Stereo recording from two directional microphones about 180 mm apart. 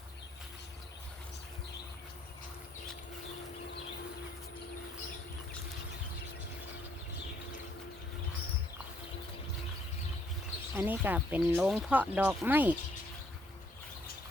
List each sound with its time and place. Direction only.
10.8 s speech: 10° right (ahead or behind)